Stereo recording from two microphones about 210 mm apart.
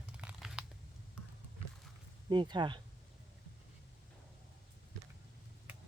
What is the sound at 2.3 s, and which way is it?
Speech, 20° right (ahead or behind).